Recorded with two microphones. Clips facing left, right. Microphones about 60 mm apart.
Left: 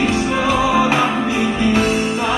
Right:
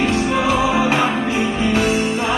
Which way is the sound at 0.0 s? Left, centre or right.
Centre.